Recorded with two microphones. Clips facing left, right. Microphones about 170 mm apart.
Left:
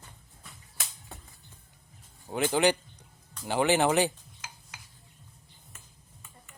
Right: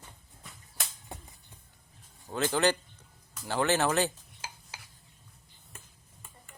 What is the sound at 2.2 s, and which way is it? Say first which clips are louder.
Speech: left 2 dB; 15° left (ahead or behind).